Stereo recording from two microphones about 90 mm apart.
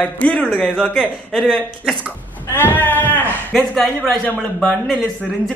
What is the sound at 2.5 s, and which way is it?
Sheep, 20° left (ahead or behind).